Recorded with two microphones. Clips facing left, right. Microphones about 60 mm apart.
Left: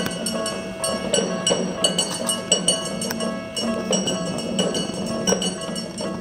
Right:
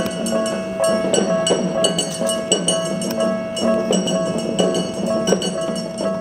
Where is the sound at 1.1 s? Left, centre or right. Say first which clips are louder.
Right 5 dB; centre.